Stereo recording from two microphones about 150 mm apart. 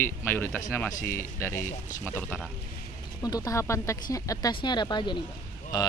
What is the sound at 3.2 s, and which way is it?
Speech, 25° left (ahead or behind).